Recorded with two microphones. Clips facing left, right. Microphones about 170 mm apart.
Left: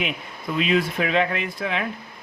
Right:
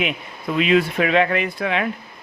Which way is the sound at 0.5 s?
65° right (ahead or behind).